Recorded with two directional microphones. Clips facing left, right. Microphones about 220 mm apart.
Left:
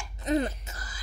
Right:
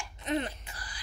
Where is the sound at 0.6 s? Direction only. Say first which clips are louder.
Left 2 dB; 40° left (ahead or behind).